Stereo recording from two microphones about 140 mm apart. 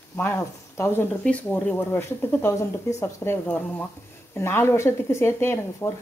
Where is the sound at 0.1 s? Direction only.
15° left (ahead or behind).